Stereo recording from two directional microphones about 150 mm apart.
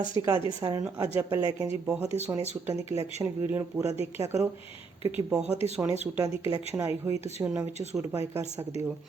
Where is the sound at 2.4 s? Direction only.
45° right (ahead or behind).